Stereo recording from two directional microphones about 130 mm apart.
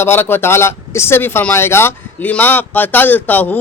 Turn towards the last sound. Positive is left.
turn(degrees=15)  # may be behind; listen again after turning